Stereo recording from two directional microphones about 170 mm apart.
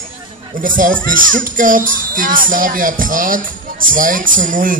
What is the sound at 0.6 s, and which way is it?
Speech, 55° right (ahead or behind).